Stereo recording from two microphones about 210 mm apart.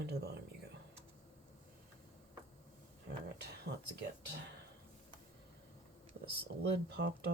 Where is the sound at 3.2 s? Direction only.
55° right (ahead or behind).